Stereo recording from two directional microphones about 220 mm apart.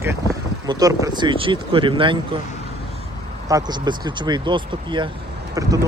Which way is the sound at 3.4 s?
20° right (ahead or behind).